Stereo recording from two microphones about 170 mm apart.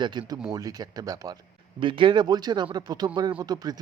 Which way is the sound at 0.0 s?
25° right (ahead or behind).